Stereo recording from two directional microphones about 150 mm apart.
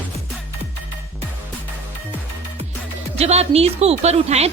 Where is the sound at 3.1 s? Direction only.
45° right (ahead or behind).